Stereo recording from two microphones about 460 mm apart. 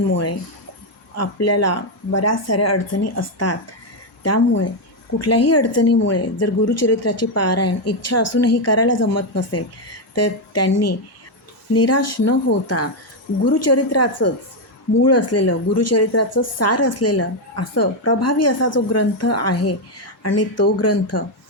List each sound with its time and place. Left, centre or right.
0.1 s speech: left